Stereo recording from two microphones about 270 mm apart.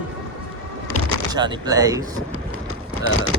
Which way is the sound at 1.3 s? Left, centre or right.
Centre.